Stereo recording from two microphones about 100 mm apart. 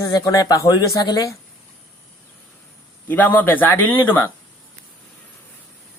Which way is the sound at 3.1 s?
15° left (ahead or behind).